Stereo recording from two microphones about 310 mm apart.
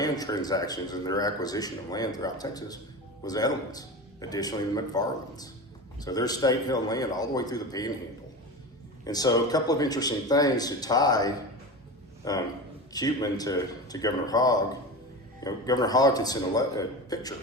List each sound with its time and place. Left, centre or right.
0.0 s speech: centre
9.0 s speech: centre